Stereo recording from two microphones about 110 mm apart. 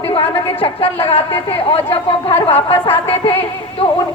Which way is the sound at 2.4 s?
55° left (ahead or behind).